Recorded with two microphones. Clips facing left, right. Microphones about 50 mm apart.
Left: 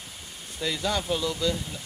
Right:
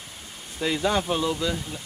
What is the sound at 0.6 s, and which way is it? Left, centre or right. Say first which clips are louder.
Speech: right 4 dB; right.